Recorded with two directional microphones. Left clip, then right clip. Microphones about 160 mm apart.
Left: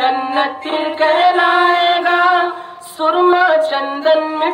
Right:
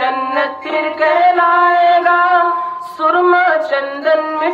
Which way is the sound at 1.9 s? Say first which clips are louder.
Right 2 dB; 15° right (ahead or behind).